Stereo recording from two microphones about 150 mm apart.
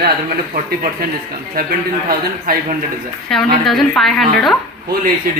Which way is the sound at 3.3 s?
Centre (ahead or behind).